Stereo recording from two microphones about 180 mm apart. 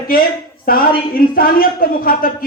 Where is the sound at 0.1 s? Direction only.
55° left (ahead or behind).